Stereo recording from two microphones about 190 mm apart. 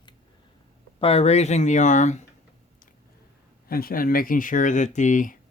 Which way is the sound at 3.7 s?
50° left (ahead or behind).